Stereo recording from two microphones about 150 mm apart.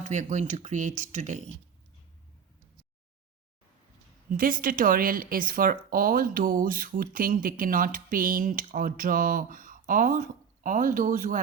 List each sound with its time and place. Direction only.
0.0 s speech: 55° right (ahead or behind)
4.3 s speech: 70° right (ahead or behind)